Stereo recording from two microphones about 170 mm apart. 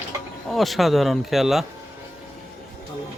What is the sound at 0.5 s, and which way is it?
Speech, centre (ahead or behind).